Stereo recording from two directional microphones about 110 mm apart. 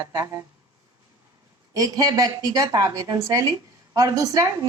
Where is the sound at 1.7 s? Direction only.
35° right (ahead or behind).